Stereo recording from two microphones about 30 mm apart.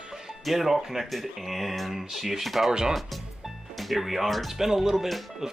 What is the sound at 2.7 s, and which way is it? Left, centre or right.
Speech, right.